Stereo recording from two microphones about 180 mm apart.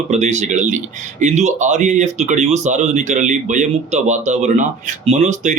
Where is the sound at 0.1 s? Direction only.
40° right (ahead or behind).